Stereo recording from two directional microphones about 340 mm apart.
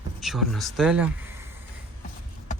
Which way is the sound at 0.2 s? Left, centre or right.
Centre.